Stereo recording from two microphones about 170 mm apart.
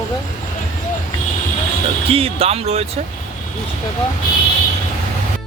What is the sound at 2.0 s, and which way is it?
Speech, 35° right (ahead or behind).